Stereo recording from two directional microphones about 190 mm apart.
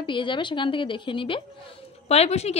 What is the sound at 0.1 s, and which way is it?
A woman's voice, 25° left (ahead or behind).